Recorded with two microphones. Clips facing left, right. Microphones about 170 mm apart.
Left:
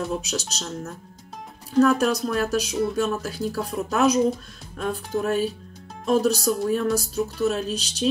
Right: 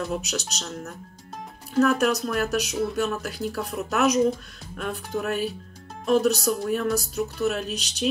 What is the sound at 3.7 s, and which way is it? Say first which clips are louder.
Music: left 2 dB; 30° left (ahead or behind).